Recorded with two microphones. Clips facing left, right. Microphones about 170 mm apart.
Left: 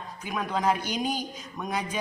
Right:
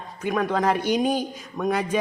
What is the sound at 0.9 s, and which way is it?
Speech, centre (ahead or behind).